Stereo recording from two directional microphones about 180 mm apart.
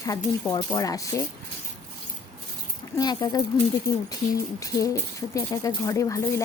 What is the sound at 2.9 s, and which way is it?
Speech, 20° left (ahead or behind).